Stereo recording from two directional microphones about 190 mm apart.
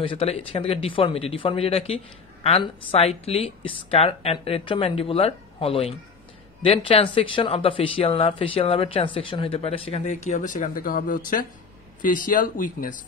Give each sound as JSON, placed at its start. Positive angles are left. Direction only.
{"t": 0.0, "sound": "speech", "side_deg": 30}